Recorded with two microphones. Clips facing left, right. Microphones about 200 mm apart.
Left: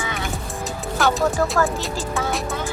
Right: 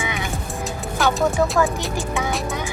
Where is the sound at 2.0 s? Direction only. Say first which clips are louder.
Right 1 dB; 15° right (ahead or behind).